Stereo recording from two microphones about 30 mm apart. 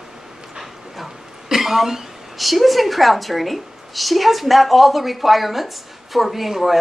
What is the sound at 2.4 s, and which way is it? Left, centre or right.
A woman's voice, centre.